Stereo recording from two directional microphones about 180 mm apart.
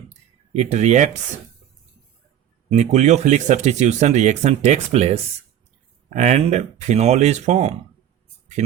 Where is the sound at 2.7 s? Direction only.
40° right (ahead or behind).